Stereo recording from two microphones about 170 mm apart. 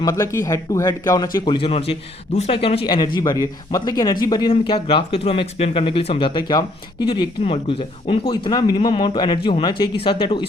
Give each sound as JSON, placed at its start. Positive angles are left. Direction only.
{"t": 0.0, "sound": "speech", "side_deg": 20}